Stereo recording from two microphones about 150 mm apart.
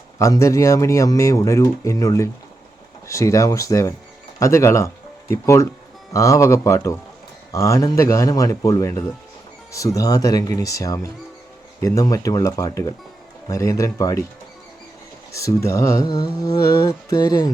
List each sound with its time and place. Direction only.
0.2 s speech: 20° left (ahead or behind)
15.3 s speech: 20° left (ahead or behind)